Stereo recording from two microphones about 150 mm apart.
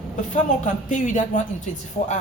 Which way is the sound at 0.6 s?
55° left (ahead or behind).